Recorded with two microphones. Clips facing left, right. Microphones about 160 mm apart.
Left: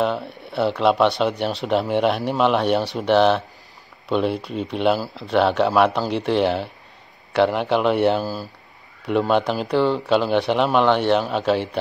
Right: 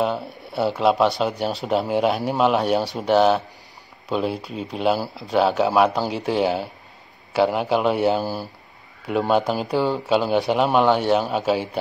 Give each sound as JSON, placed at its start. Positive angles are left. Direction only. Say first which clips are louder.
{"t": 0.0, "sound": "speech", "louder": "left 1 dB", "side_deg": -5}
{"t": 8.2, "sound": "speech", "louder": "even", "side_deg": -25}
{"t": 9.3, "sound": "speech", "louder": "right 2 dB", "side_deg": -5}